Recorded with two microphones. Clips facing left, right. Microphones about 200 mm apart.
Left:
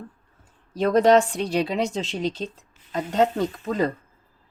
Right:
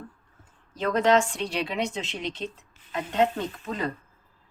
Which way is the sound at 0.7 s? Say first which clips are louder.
Left 5 dB; 35° left (ahead or behind).